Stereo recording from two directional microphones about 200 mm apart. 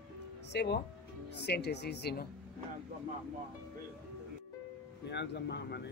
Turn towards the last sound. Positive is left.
turn(degrees=60)  # may be behind; listen again after turning